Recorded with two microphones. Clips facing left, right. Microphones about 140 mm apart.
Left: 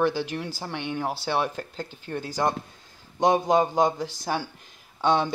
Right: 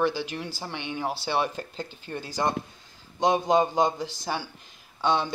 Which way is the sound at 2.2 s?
10° left (ahead or behind).